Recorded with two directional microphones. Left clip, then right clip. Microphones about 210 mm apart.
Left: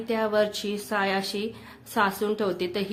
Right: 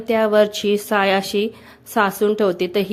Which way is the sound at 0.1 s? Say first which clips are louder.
Right 9 dB; 35° right (ahead or behind).